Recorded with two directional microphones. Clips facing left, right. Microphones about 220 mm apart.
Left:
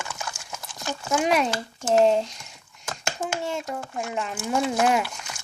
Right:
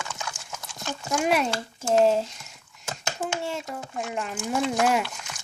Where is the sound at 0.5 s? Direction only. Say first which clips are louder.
Left 3 dB; 10° left (ahead or behind).